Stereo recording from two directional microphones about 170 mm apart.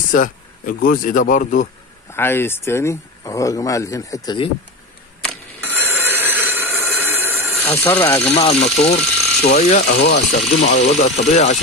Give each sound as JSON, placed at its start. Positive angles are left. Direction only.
{"t": 0.1, "sound": "speech", "side_deg": 55}
{"t": 2.1, "sound": "speech", "side_deg": 15}
{"t": 5.8, "sound": "a sound", "side_deg": -10}
{"t": 7.6, "sound": "speech", "side_deg": 15}
{"t": 8.5, "sound": "speech", "side_deg": 40}